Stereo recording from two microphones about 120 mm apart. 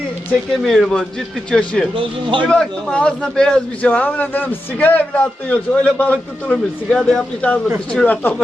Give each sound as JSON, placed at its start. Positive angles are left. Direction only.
{"t": 0.6, "sound": "a man's voice", "side_deg": 5}
{"t": 2.0, "sound": "a man's voice", "side_deg": -45}
{"t": 2.5, "sound": "a man's voice", "side_deg": 5}